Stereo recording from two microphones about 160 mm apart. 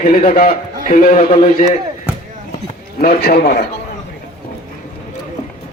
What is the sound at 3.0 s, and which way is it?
Speech, 70° left (ahead or behind).